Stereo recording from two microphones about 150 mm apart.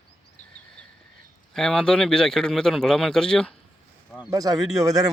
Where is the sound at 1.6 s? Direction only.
5° left (ahead or behind).